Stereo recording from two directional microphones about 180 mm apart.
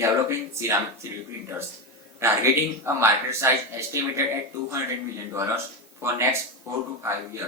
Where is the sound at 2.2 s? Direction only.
15° right (ahead or behind).